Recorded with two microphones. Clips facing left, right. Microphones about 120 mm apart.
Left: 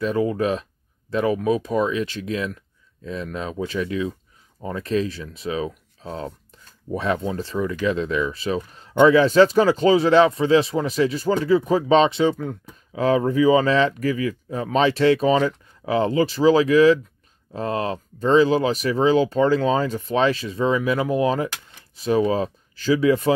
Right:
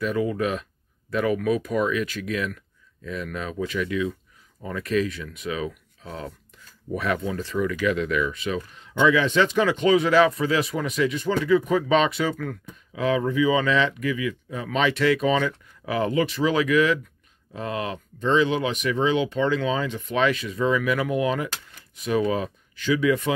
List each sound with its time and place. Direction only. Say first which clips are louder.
0.0 s speech: left 3 dB; 30° left (ahead or behind)
12.9 s speech: left 4 dB; 40° left (ahead or behind)